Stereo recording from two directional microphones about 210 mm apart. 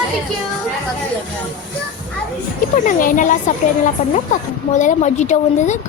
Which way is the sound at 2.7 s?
40° left (ahead or behind).